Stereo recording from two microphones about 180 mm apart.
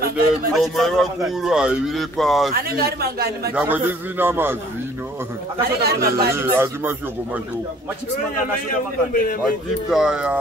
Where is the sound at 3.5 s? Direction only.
10° right (ahead or behind).